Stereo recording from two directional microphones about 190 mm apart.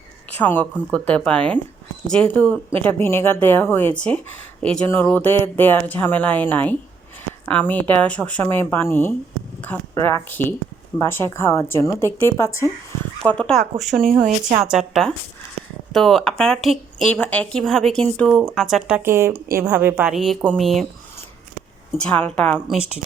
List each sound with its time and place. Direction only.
0.3 s speech: 10° left (ahead or behind)
14.2 s a woman's voice: 35° right (ahead or behind)
14.6 s speech: centre (ahead or behind)
22.0 s speech: 5° left (ahead or behind)